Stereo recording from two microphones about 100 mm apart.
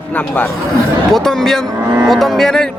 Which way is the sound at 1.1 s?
5° left (ahead or behind).